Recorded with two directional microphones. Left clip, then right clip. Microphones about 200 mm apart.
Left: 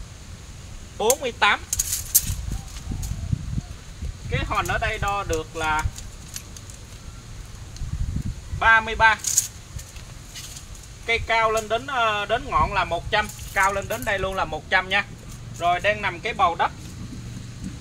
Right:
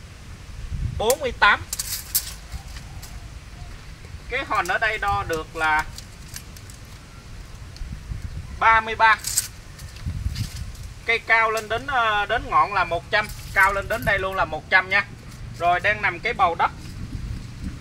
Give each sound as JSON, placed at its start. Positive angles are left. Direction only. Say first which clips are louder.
{"t": 0.9, "sound": "speech", "louder": "even", "side_deg": 15}
{"t": 4.3, "sound": "speech", "louder": "right 2 dB", "side_deg": 10}
{"t": 8.5, "sound": "speech", "louder": "even", "side_deg": 10}
{"t": 11.1, "sound": "speech", "louder": "right 2 dB", "side_deg": 10}